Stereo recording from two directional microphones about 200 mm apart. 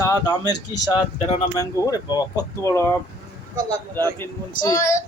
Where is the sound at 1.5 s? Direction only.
15° left (ahead or behind).